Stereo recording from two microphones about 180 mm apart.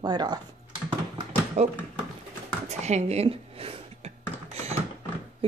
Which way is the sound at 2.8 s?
40° right (ahead or behind).